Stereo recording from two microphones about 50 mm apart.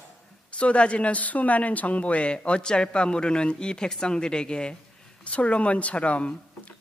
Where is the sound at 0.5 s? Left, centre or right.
Left.